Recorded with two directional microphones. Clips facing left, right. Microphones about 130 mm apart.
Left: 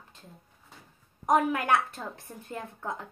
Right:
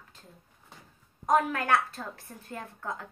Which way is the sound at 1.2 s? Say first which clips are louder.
Left 1 dB; 15° left (ahead or behind).